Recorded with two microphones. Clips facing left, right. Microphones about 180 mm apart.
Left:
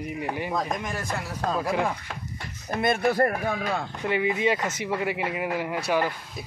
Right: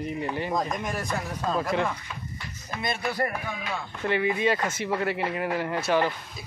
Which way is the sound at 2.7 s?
55° left (ahead or behind).